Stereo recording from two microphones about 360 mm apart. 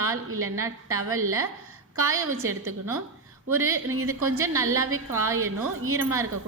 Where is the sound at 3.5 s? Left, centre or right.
Right.